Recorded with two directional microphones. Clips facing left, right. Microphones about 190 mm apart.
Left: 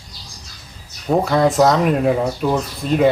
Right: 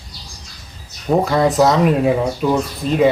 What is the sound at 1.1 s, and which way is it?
Speech, centre (ahead or behind).